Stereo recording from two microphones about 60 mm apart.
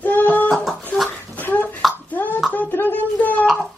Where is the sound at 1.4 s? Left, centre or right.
Left.